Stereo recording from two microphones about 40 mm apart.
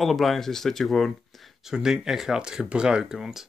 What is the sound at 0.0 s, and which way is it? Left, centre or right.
Speech, centre.